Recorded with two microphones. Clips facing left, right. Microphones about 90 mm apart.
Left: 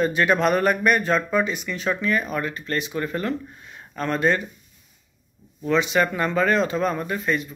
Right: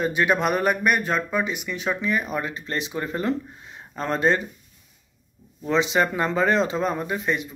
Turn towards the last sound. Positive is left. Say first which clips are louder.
# left 1 dB
turn(degrees=-15)  # may be behind; listen again after turning